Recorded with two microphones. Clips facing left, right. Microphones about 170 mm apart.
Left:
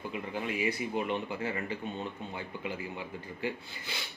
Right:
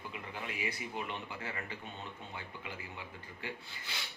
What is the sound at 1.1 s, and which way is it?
Speech, 20° left (ahead or behind).